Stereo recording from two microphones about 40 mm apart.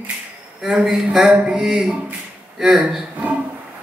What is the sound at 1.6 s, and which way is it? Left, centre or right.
Speech, centre.